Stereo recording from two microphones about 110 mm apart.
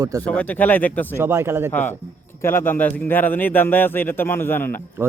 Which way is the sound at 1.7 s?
15° left (ahead or behind).